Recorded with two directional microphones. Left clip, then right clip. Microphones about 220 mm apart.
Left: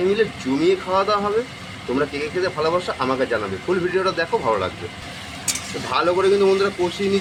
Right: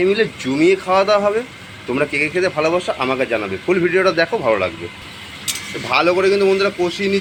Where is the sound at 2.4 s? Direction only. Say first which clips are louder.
Even; 10° right (ahead or behind).